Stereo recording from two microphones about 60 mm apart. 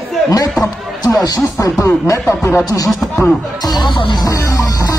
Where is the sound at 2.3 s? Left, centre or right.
Left.